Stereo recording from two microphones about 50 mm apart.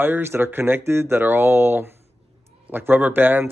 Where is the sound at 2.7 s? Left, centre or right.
Right.